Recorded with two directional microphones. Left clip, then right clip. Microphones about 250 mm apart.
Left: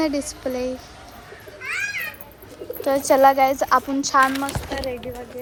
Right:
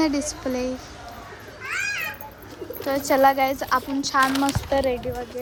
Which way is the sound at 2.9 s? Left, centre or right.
Centre.